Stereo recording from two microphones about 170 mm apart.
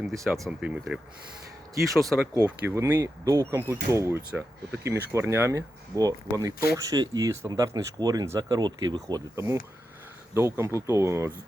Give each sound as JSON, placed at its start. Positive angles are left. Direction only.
{"t": 0.4, "sound": "speech", "side_deg": -5}
{"t": 2.0, "sound": "speech", "side_deg": -5}
{"t": 2.3, "sound": "speech", "side_deg": -15}